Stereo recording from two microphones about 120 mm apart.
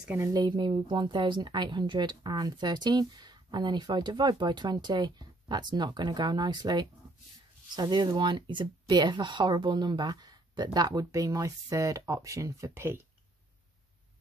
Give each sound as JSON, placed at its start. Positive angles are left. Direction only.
{"t": 0.0, "sound": "a woman's voice", "side_deg": -15}
{"t": 0.3, "sound": "speech", "side_deg": -35}